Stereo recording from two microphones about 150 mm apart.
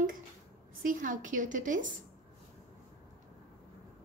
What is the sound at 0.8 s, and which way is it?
A woman's voice, 65° right (ahead or behind).